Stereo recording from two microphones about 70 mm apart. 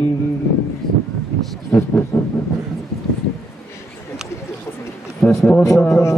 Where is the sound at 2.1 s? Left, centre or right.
Left.